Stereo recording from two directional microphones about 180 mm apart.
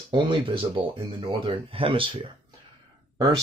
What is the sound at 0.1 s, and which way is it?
Speech, 25° right (ahead or behind).